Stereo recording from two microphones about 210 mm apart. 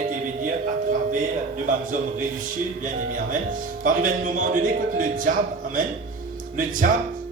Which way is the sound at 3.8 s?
40° right (ahead or behind).